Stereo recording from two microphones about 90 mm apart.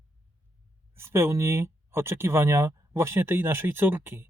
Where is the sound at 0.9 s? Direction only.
30° right (ahead or behind).